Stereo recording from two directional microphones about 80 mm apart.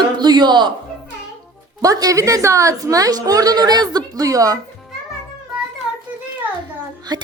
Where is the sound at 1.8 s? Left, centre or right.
Right.